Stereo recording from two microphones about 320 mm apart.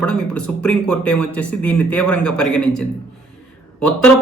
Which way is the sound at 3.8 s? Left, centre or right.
Left.